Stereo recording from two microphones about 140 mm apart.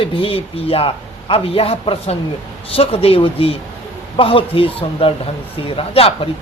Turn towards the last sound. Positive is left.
turn(degrees=45)  # may be behind; listen again after turning